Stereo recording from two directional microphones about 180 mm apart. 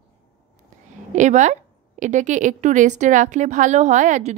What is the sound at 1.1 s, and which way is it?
A woman's voice, 40° right (ahead or behind).